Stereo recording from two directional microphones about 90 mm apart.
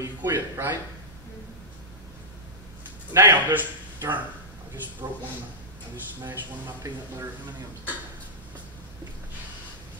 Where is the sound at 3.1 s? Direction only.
30° right (ahead or behind).